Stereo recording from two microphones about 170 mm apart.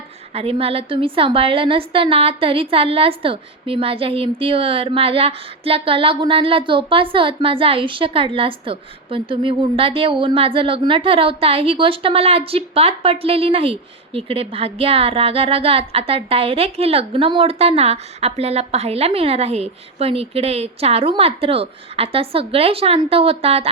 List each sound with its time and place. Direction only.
0.3 s a woman's voice: 35° right (ahead or behind)